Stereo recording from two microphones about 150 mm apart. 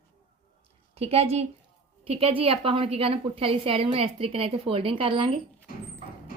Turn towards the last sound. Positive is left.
turn(degrees=-30)  # may be behind; listen again after turning